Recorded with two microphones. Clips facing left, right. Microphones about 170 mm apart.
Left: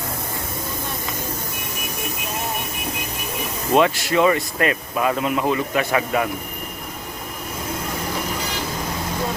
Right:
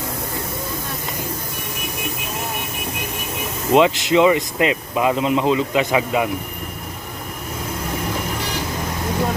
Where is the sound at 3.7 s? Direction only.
20° right (ahead or behind).